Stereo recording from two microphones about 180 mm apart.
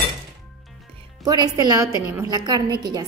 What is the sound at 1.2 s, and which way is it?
A woman's voice, 20° right (ahead or behind).